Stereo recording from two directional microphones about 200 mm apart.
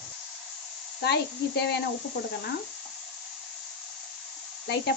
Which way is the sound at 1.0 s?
55° left (ahead or behind).